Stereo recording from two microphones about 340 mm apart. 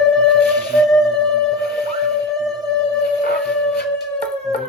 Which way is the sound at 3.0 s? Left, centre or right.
Left.